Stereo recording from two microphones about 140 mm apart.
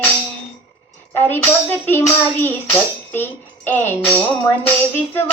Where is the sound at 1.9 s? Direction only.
15° left (ahead or behind).